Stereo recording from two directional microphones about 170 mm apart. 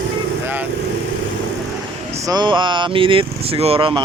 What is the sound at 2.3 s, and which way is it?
Speech, 25° right (ahead or behind).